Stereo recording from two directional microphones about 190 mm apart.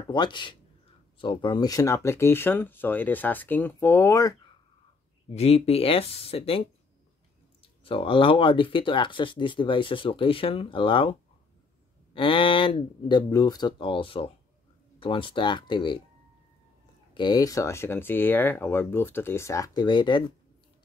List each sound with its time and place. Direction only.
0.1 s speech: 25° left (ahead or behind)
5.3 s speech: 35° left (ahead or behind)
7.6 s speech: 30° left (ahead or behind)
17.1 s speech: 25° left (ahead or behind)